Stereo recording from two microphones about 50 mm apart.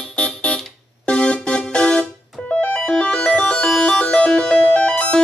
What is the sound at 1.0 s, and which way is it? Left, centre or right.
Music, centre.